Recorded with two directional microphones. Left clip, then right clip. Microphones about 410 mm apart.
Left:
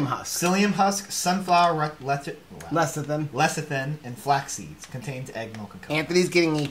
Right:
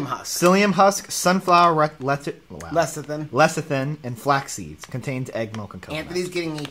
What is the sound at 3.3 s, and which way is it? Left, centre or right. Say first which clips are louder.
Speech: right 7 dB; right.